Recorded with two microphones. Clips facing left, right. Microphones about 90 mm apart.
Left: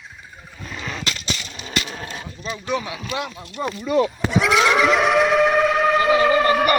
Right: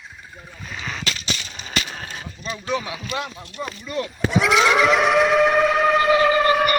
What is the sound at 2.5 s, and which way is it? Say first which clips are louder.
Speech: left 1 dB; 10° left (ahead or behind).